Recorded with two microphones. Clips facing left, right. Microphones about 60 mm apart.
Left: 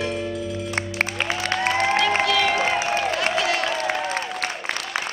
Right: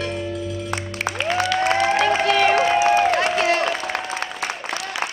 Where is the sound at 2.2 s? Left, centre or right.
Right.